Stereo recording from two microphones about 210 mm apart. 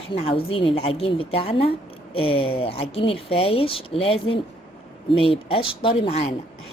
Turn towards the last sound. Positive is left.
turn(degrees=30)  # may be behind; listen again after turning